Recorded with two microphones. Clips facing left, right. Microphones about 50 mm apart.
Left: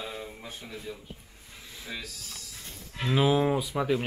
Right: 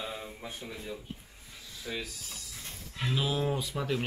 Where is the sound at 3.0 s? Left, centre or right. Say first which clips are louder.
Left 7 dB; left.